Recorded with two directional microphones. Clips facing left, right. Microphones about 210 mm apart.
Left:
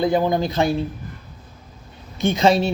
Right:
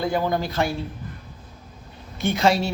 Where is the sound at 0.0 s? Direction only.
20° left (ahead or behind).